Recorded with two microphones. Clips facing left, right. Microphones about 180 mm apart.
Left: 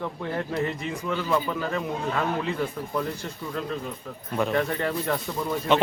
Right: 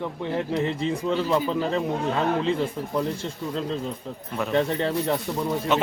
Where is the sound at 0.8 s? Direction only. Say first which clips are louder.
Right 5 dB; 30° right (ahead or behind).